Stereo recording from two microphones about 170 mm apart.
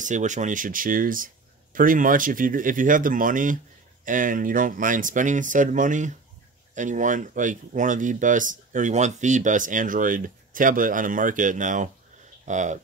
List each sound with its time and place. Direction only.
0.0 s speech: 45° right (ahead or behind)